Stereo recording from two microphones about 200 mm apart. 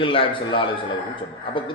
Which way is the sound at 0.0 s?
25° left (ahead or behind).